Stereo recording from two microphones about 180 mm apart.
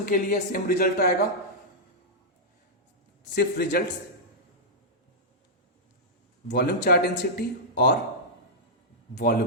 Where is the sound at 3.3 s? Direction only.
60° left (ahead or behind).